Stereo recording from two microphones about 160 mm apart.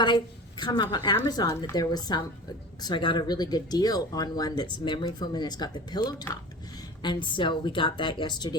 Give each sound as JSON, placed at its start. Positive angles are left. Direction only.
{"t": 0.0, "sound": "speech", "side_deg": 30}